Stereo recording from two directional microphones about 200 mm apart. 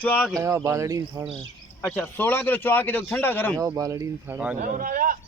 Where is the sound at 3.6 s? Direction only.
15° right (ahead or behind).